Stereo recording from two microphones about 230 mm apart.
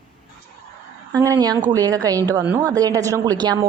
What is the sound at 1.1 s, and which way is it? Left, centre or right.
A woman's voice, centre.